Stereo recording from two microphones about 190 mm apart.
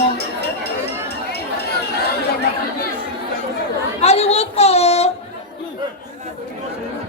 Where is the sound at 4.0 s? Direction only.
35° left (ahead or behind).